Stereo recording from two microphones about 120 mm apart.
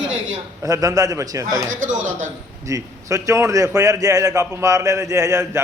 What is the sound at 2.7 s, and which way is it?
A man's voice, 25° right (ahead or behind).